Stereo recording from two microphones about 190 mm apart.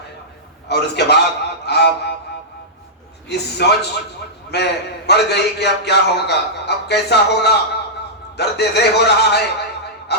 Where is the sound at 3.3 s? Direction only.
60° left (ahead or behind).